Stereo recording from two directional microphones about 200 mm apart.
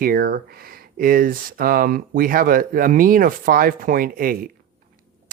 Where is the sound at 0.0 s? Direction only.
45° right (ahead or behind).